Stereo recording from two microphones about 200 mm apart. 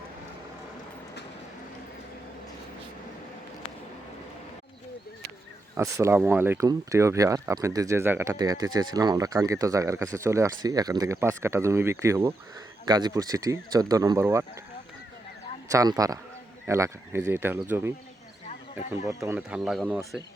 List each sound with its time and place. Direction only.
5.7 s speech: 15° right (ahead or behind)
15.7 s speech: 15° right (ahead or behind)
19.0 s speech: 15° right (ahead or behind)
19.4 s speech: 5° right (ahead or behind)